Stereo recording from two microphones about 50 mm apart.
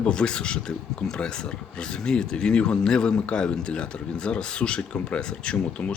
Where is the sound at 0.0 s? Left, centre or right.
Centre.